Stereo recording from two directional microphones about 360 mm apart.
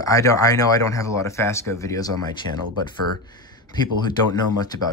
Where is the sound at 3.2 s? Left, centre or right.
Centre.